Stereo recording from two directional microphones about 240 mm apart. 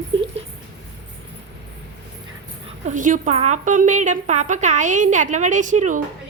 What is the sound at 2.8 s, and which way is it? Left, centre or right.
A woman's voice, right.